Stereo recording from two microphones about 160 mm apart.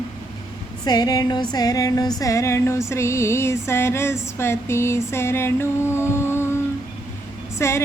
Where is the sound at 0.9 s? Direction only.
25° left (ahead or behind).